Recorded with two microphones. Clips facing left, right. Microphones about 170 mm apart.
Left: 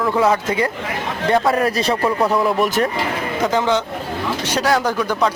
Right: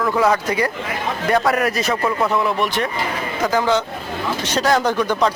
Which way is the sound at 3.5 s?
20° left (ahead or behind).